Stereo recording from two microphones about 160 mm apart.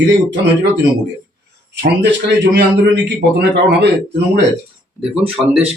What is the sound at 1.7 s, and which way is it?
A man's voice, 90° right.